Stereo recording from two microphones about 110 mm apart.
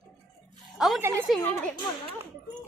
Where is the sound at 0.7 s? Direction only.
Centre (ahead or behind).